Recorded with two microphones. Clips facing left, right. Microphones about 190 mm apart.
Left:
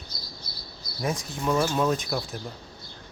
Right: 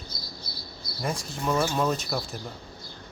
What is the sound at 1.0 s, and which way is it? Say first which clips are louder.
Speech: left 2 dB; centre (ahead or behind).